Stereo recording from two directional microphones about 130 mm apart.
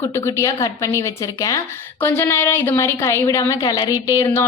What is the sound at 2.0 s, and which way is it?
A woman's voice, 20° left (ahead or behind).